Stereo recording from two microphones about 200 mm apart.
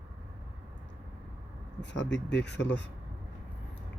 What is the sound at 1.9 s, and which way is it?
Speech, 60° left (ahead or behind).